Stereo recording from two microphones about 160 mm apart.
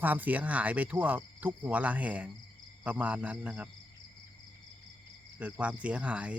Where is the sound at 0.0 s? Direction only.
10° right (ahead or behind).